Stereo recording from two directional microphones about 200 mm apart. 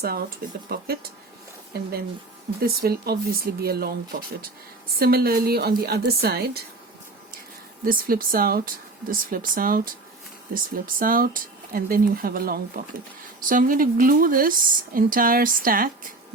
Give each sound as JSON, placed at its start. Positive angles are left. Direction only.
{"t": 0.0, "sound": "a woman's voice", "side_deg": -50}
{"t": 7.9, "sound": "a woman's voice", "side_deg": -45}